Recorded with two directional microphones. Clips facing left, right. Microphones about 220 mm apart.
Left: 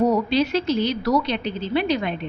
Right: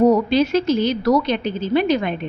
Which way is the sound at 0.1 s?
50° right (ahead or behind).